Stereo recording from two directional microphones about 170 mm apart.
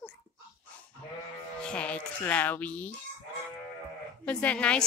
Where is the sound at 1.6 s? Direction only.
5° left (ahead or behind).